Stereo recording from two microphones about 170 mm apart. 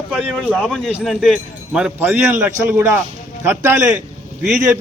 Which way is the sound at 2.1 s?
15° right (ahead or behind).